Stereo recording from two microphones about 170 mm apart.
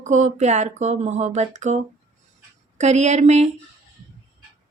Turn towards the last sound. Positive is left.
turn(degrees=-40)  # may be behind; listen again after turning